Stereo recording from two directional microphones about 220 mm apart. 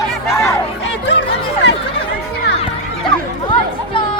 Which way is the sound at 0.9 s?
55° left (ahead or behind).